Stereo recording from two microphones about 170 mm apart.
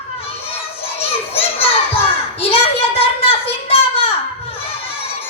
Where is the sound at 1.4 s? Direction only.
35° left (ahead or behind).